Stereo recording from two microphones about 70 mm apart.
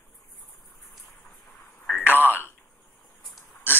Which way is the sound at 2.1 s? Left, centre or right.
Left.